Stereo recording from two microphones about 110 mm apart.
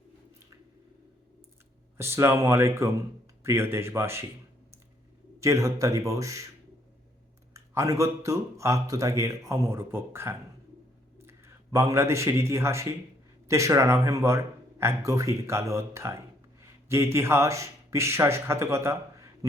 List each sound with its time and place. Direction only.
2.0 s speech: 25° right (ahead or behind)
5.4 s speech: 30° right (ahead or behind)
7.5 s a man's voice: 30° right (ahead or behind)